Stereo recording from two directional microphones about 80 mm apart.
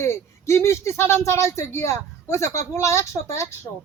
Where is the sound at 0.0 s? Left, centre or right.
Left.